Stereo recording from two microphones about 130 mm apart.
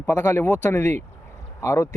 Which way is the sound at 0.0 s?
15° left (ahead or behind).